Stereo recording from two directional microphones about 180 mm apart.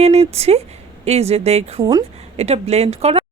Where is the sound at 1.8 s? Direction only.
20° right (ahead or behind).